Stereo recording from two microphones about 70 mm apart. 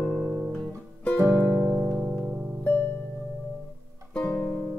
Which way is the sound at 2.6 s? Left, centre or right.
Left.